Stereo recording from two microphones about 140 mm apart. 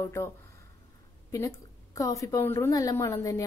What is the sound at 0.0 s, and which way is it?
A woman's voice, 20° left (ahead or behind).